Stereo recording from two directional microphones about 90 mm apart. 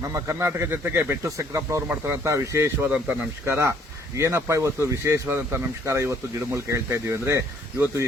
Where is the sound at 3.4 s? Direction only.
30° right (ahead or behind).